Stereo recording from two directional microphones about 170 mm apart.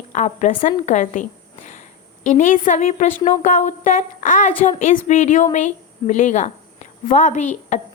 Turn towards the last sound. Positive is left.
turn(degrees=45)  # may be behind; listen again after turning